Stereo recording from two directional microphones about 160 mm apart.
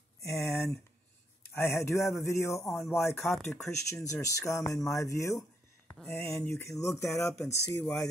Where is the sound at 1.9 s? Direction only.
Centre (ahead or behind).